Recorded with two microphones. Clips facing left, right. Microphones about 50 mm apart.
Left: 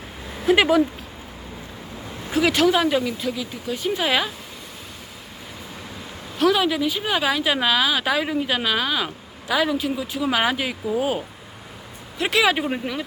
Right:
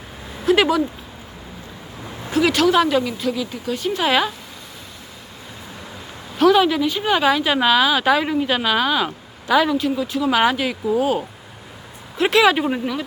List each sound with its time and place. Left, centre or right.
0.4 s speech: centre
2.5 s speech: centre
2.7 s speech: centre
4.0 s speech: centre
6.4 s speech: centre
12.1 s speech: centre